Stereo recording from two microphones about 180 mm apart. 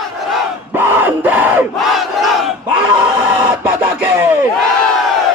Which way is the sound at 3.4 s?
10° right (ahead or behind).